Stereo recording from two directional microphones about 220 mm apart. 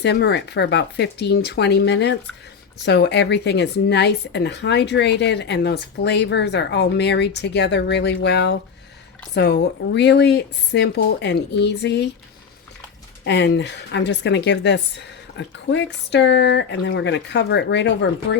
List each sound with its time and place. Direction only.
0.0 s speech: 50° left (ahead or behind)
13.2 s speech: 50° left (ahead or behind)